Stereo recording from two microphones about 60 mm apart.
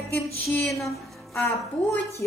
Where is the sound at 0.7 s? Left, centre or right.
Centre.